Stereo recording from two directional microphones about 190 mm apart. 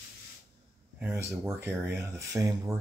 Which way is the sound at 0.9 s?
10° right (ahead or behind).